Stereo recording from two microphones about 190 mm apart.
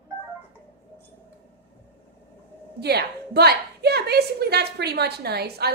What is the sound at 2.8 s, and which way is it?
A woman's voice, 60° right (ahead or behind).